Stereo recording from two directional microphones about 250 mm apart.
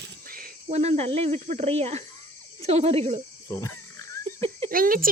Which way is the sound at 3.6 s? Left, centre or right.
Centre.